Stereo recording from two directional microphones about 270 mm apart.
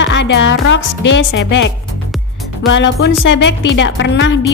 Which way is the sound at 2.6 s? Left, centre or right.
Left.